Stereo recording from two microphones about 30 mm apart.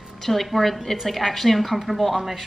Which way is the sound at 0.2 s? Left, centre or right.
Centre.